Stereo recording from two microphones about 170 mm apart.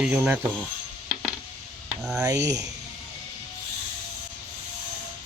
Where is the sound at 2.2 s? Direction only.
20° right (ahead or behind).